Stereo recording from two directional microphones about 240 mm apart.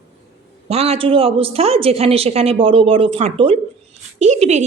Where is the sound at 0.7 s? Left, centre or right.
Right.